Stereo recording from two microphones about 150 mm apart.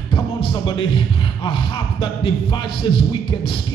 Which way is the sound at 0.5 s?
30° left (ahead or behind).